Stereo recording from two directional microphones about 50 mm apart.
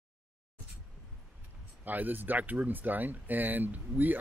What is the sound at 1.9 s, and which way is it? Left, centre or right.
Speech, right.